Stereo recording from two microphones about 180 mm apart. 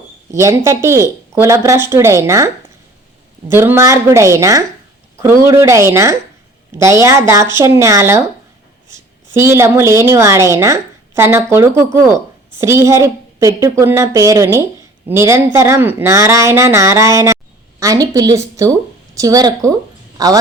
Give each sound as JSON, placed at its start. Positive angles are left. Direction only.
{"t": 0.3, "sound": "a woman's voice", "side_deg": -15}
{"t": 3.5, "sound": "a woman's voice", "side_deg": -15}